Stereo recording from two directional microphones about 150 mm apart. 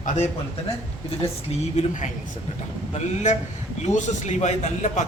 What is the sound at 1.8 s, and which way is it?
Speech, 55° left (ahead or behind).